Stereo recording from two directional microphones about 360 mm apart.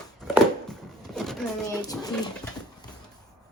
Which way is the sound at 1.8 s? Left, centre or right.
Centre.